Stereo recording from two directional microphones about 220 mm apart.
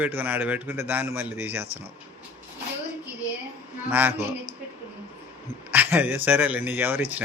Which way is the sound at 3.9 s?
10° right (ahead or behind).